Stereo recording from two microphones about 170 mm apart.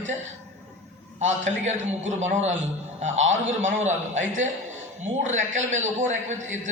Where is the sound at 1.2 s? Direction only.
45° right (ahead or behind).